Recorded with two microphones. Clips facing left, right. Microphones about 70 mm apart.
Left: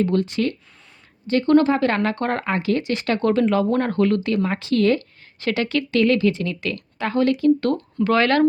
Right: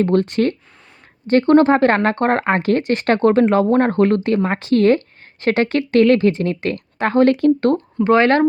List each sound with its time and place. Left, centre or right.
0.0 s speech: right
7.9 s speech: right